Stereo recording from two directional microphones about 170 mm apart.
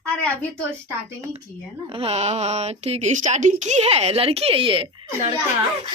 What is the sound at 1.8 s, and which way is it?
Speech, 35° right (ahead or behind).